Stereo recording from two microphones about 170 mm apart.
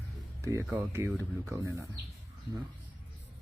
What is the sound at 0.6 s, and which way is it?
Speech, 10° right (ahead or behind).